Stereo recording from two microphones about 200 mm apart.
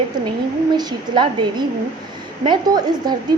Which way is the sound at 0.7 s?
20° right (ahead or behind).